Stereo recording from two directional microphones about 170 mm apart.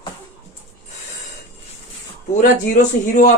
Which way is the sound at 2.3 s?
50° left (ahead or behind).